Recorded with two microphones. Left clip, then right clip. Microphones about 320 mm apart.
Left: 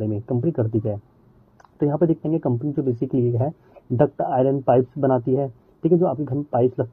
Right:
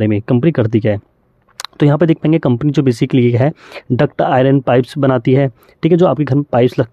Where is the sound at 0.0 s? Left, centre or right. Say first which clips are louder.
Right 10 dB; right.